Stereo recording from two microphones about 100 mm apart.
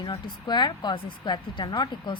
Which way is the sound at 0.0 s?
45° left (ahead or behind).